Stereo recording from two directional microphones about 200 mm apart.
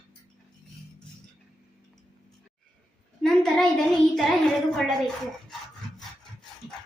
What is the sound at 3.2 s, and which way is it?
A child's voice, 5° left (ahead or behind).